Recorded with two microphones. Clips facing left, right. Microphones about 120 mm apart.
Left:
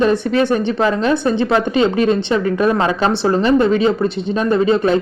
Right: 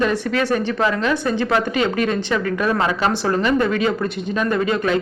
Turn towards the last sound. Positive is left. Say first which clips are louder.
# left 5 dB
turn(degrees=30)  # may be behind; listen again after turning